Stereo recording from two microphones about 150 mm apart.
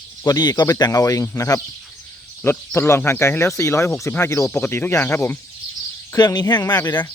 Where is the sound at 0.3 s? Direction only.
25° left (ahead or behind).